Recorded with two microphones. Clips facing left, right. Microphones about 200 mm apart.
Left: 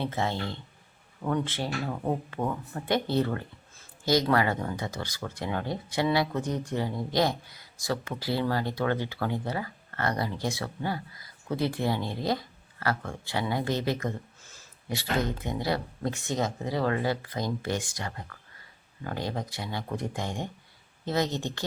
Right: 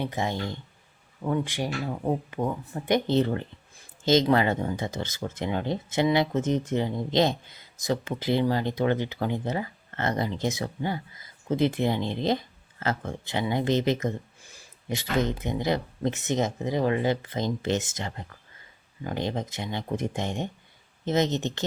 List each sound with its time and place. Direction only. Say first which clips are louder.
0.0 s speech: right 1 dB; 15° right (ahead or behind)